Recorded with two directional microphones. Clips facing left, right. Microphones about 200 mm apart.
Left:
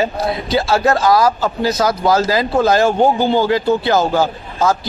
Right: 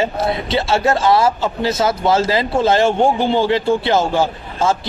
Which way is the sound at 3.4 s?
30° right (ahead or behind).